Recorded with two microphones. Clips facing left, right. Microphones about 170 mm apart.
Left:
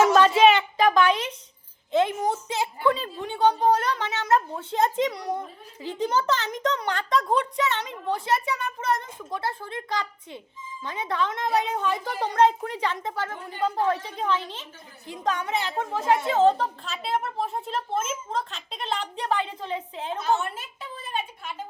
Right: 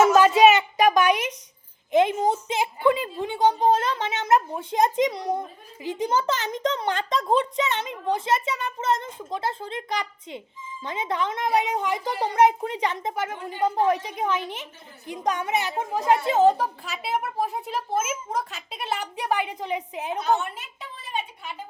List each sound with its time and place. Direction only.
0.1 s a woman's voice: 10° right (ahead or behind)